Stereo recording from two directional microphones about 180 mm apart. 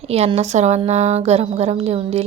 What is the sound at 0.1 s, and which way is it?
A woman's voice, 35° right (ahead or behind).